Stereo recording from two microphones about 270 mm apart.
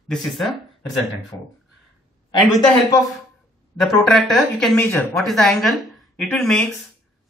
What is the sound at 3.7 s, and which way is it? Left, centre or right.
Speech, centre.